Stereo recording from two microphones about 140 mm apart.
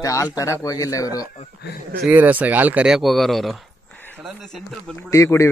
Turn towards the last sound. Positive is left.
turn(degrees=20)  # may be behind; listen again after turning